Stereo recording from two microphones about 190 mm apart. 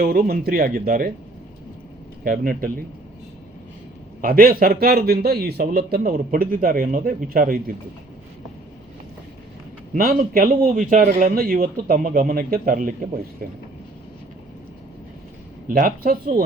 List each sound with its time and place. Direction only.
0.0 s a man's voice: 50° right (ahead or behind)
2.2 s a man's voice: 50° right (ahead or behind)
4.2 s a man's voice: 50° right (ahead or behind)
9.9 s a man's voice: 50° right (ahead or behind)
15.6 s a man's voice: 45° right (ahead or behind)